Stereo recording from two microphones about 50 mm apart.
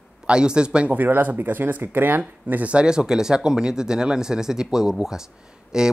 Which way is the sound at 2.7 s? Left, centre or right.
Centre.